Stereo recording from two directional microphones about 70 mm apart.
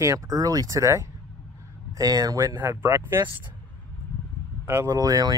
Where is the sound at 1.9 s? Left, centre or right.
Right.